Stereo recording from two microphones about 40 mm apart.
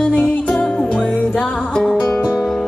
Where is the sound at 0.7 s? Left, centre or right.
Left.